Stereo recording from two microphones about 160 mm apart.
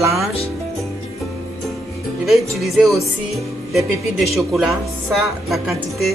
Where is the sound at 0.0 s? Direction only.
20° right (ahead or behind).